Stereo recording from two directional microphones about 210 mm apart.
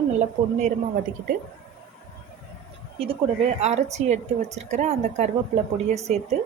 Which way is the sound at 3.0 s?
30° right (ahead or behind).